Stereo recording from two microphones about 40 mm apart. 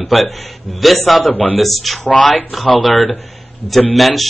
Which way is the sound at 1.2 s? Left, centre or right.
Left.